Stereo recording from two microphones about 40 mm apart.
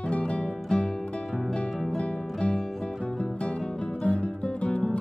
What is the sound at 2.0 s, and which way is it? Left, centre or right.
Music, left.